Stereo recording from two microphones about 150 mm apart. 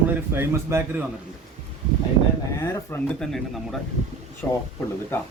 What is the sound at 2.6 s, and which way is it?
Speech, 15° left (ahead or behind).